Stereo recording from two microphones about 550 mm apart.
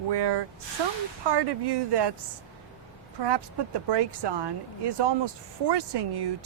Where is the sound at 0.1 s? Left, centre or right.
Right.